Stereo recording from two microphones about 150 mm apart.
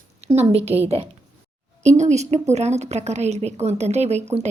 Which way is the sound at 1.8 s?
50° right (ahead or behind).